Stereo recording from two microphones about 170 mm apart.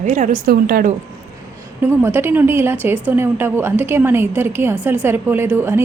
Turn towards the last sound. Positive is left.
turn(degrees=-15)  # may be behind; listen again after turning